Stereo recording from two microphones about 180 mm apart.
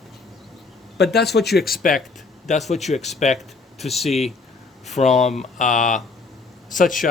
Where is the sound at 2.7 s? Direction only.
40° left (ahead or behind).